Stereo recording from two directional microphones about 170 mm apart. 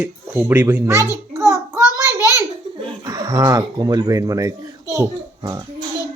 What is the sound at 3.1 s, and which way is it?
Speech, 20° right (ahead or behind).